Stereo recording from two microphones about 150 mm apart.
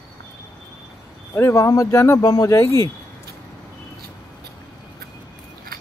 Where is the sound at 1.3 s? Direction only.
20° left (ahead or behind).